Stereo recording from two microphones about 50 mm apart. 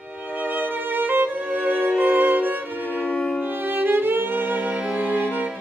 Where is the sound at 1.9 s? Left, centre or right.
Right.